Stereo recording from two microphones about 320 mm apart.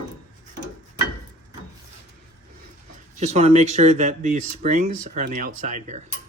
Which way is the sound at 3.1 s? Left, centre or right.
Right.